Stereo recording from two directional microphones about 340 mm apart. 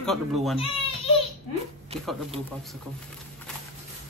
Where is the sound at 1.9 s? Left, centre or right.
Centre.